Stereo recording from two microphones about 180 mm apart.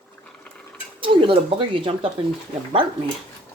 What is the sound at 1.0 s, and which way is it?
Speech, 30° right (ahead or behind).